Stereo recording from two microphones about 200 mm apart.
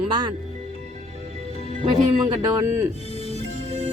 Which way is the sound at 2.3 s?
20° right (ahead or behind).